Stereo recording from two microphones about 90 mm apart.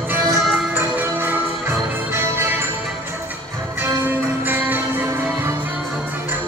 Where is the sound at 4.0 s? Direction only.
20° right (ahead or behind).